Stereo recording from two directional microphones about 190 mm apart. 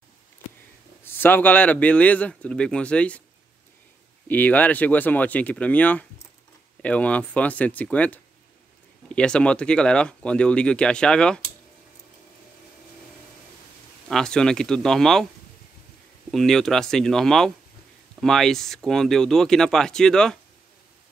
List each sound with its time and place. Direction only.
1.0 s a man's voice: 10° left (ahead or behind)
4.3 s a man's voice: 10° left (ahead or behind)
14.0 s speech: 5° left (ahead or behind)
16.3 s speech: centre (ahead or behind)